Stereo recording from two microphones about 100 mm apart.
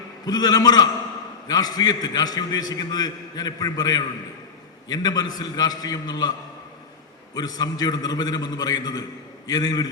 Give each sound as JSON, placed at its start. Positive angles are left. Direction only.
{"t": 0.3, "sound": "a man's voice", "side_deg": 40}
{"t": 7.3, "sound": "a man's voice", "side_deg": 40}